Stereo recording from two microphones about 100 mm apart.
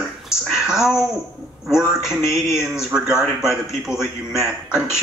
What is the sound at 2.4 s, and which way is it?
A man's voice, 5° right (ahead or behind).